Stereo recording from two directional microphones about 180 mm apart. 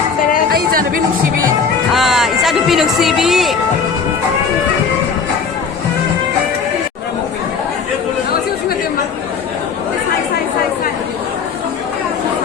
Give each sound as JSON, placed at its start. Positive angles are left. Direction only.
{"t": 0.5, "sound": "chatter", "side_deg": -55}
{"t": 1.9, "sound": "music", "side_deg": 0}